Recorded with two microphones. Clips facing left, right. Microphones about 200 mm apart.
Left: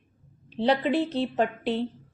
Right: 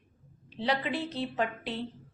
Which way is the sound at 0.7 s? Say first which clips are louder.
Left 7 dB; 30° left (ahead or behind).